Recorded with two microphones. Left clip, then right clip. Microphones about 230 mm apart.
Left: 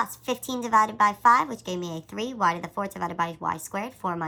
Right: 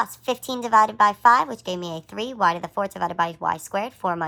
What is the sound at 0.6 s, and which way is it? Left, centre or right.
A woman's voice, centre.